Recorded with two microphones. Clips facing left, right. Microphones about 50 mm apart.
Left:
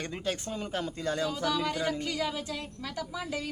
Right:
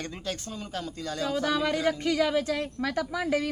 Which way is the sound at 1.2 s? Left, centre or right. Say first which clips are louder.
Right 5 dB; right.